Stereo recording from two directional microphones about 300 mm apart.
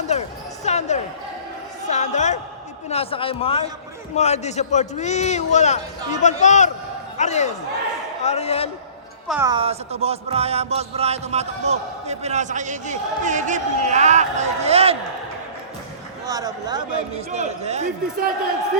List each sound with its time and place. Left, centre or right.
0.1 s music: left
1.9 s a man's voice: left
9.2 s speech: centre
9.5 s speech: centre
16.2 s speech: centre